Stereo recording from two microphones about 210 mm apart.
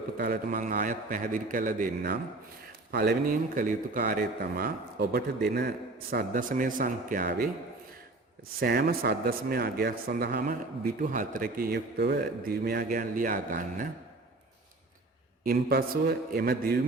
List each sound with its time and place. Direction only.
0.2 s a man's voice: 45° right (ahead or behind)
2.9 s a man's voice: 50° right (ahead or behind)
8.6 s a man's voice: 45° right (ahead or behind)
15.4 s a man's voice: 45° right (ahead or behind)